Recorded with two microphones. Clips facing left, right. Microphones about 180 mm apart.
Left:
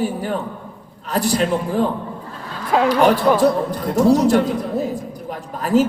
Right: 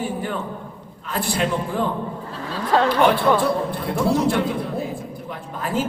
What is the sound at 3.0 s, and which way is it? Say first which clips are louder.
A man's voice: left 3 dB; 40° left (ahead or behind).